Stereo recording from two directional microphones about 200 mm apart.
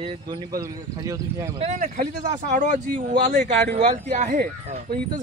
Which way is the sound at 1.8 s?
40° right (ahead or behind).